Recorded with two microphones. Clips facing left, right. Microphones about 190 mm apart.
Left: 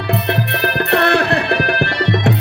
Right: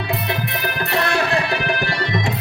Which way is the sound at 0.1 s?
65° left (ahead or behind).